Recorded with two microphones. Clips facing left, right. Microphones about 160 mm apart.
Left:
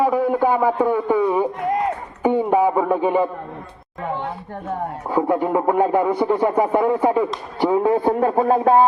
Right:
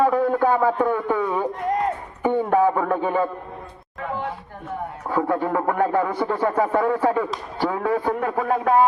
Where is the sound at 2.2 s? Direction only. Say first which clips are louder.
Left 2 dB; 15° left (ahead or behind).